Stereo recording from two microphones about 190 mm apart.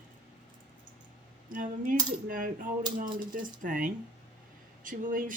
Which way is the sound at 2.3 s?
45° right (ahead or behind).